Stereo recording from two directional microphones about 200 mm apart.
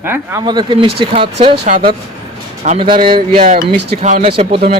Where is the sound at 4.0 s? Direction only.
35° right (ahead or behind).